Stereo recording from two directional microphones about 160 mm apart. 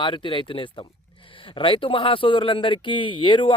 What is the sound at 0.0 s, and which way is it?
A man's voice, 30° left (ahead or behind).